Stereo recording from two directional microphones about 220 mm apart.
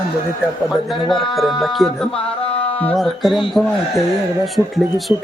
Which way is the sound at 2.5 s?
25° left (ahead or behind).